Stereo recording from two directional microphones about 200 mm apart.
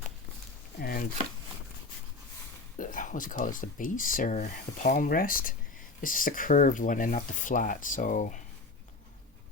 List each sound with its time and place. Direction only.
0.8 s chopping: 50° left (ahead or behind)
2.7 s speech: 40° left (ahead or behind)